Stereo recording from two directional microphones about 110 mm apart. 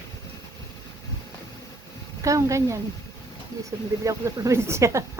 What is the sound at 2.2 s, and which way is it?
Speech, 30° right (ahead or behind).